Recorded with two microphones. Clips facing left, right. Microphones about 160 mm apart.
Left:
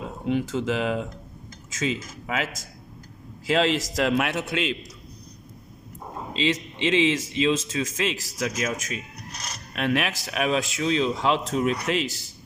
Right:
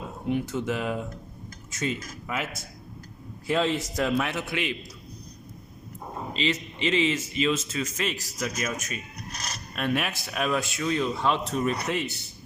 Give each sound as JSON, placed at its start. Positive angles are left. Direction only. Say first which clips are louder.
{"t": 0.3, "sound": "a man's voice", "louder": "left 2 dB", "side_deg": 90}
{"t": 6.4, "sound": "a man's voice", "louder": "left 3 dB", "side_deg": 90}